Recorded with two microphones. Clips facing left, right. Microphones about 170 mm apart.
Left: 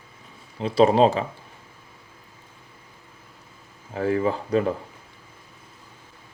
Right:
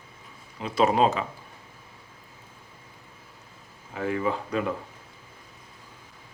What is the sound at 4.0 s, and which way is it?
Speech, 35° left (ahead or behind).